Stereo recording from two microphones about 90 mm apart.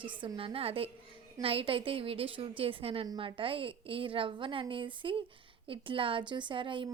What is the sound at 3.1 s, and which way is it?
A woman's voice, 80° right.